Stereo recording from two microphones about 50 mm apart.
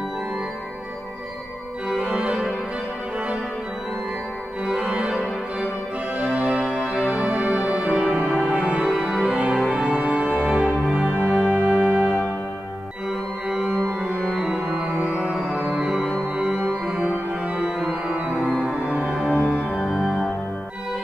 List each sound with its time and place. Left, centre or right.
2.0 s organ: right
4.6 s organ: right
6.1 s music: right
14.4 s music: centre
16.3 s music: right